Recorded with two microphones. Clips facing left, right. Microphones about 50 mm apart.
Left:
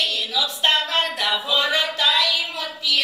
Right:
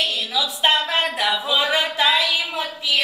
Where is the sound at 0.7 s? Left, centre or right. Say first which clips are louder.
Right 2 dB; centre.